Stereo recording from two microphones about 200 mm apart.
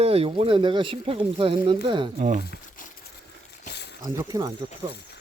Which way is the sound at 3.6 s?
55° left (ahead or behind).